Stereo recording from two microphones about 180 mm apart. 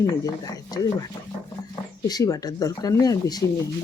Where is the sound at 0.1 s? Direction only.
20° left (ahead or behind).